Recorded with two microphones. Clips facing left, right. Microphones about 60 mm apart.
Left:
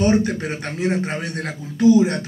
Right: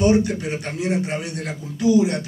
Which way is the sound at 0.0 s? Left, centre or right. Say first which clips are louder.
Even; left.